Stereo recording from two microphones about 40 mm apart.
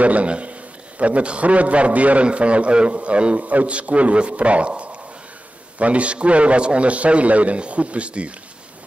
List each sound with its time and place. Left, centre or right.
0.0 s a man's voice: right